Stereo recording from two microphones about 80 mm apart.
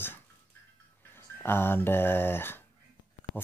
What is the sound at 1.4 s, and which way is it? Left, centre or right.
Speech, left.